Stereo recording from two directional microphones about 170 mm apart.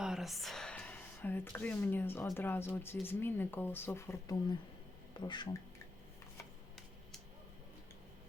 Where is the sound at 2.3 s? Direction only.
10° left (ahead or behind).